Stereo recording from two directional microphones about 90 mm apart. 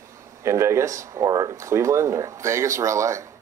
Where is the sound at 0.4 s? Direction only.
30° right (ahead or behind).